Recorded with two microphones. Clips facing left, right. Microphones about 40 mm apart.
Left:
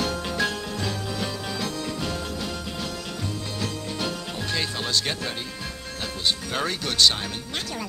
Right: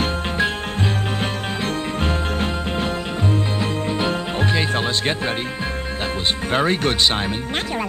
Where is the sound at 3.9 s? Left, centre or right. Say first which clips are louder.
Right 8 dB; right.